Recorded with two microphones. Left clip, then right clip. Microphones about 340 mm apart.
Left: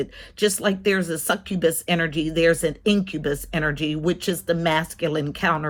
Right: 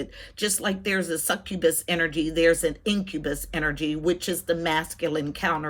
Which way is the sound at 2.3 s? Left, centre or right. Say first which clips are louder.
Left 2 dB; centre.